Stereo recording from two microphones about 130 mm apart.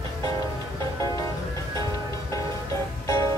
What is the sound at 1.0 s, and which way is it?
Music, 25° left (ahead or behind).